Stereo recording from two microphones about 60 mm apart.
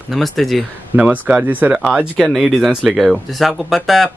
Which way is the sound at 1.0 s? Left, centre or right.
Right.